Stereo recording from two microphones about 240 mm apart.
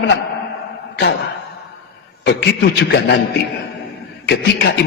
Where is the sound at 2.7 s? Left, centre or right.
Left.